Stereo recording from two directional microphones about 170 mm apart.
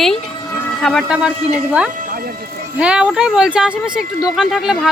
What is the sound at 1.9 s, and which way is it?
Music, 60° right (ahead or behind).